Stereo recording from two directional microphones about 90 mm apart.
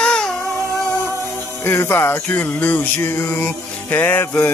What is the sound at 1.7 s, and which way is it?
Music, 30° left (ahead or behind).